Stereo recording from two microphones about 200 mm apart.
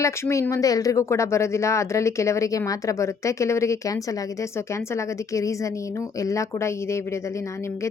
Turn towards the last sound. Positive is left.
turn(degrees=15)  # may be behind; listen again after turning